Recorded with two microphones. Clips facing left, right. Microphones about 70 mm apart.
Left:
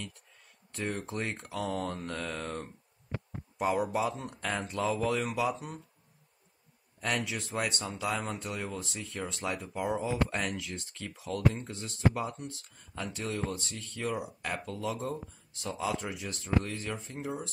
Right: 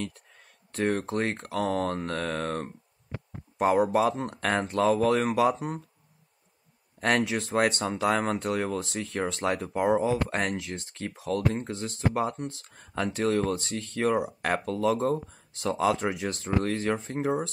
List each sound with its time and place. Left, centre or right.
0.0 s a man's voice: right
7.0 s speech: right